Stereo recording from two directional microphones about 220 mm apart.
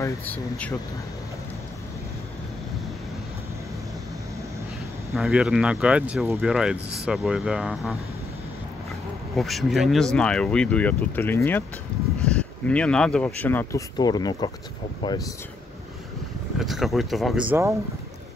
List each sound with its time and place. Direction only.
0.0 s speech: 5° left (ahead or behind)
5.1 s speech: centre (ahead or behind)
9.4 s speech: centre (ahead or behind); by 15.2 s 20° left (ahead or behind)
16.5 s speech: centre (ahead or behind)